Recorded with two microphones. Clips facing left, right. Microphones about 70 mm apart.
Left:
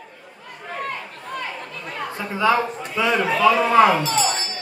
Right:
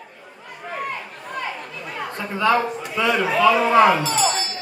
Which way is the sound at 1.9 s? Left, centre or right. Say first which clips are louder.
Even; centre.